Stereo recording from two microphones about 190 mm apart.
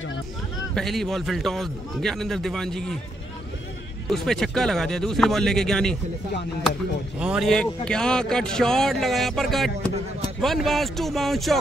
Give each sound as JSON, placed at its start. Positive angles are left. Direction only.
{"t": 0.7, "sound": "speech", "side_deg": 0}
{"t": 4.1, "sound": "speech", "side_deg": 0}
{"t": 7.2, "sound": "speech", "side_deg": -5}